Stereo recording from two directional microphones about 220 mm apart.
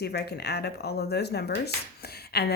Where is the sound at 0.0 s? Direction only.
45° left (ahead or behind).